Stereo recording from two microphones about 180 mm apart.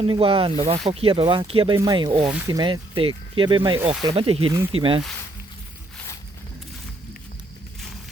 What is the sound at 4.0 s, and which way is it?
Speech, 30° right (ahead or behind).